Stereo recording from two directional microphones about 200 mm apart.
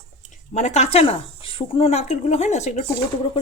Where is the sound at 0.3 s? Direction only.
35° left (ahead or behind).